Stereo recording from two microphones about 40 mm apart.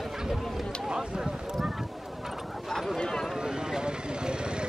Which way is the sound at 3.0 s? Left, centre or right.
Centre.